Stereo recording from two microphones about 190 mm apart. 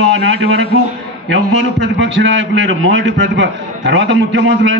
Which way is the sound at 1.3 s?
70° right (ahead or behind).